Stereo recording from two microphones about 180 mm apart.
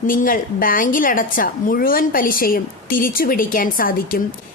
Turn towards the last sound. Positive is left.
turn(degrees=55)  # may be behind; listen again after turning